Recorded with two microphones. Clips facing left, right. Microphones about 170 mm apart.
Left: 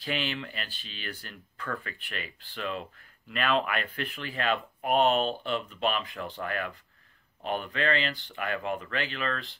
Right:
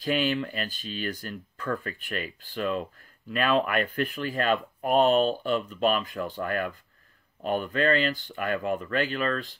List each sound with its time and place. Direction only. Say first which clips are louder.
0.0 s speech: right 7 dB; 45° right (ahead or behind)